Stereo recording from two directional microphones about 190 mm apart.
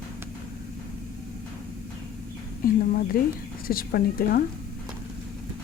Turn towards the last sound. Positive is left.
turn(degrees=50)  # may be behind; listen again after turning